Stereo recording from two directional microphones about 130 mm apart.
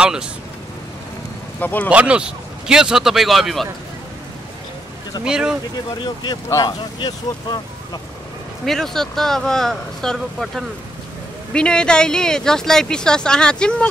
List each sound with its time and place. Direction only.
0.0 s speech: 5° right (ahead or behind)
1.6 s speech: 15° left (ahead or behind)
1.9 s speech: 10° right (ahead or behind)
5.2 s speech: 5° right (ahead or behind)
6.0 s speech: 30° left (ahead or behind)
8.6 s speech: 5° left (ahead or behind)